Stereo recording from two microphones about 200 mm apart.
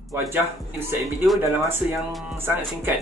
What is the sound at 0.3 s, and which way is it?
Speech, 10° right (ahead or behind).